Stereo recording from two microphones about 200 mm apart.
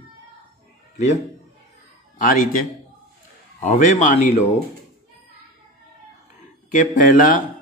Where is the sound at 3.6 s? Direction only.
40° left (ahead or behind).